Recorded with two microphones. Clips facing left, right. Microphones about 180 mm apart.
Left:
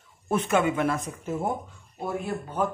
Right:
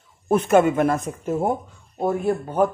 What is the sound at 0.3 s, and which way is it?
A man's voice, 45° right (ahead or behind).